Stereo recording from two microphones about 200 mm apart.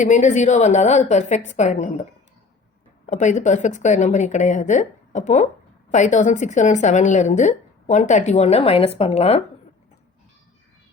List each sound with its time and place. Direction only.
0.0 s a woman's voice: 35° left (ahead or behind)
3.1 s a woman's voice: 35° left (ahead or behind)